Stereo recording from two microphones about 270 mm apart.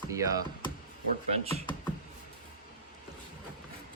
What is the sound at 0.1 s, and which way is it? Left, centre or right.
Speech, centre.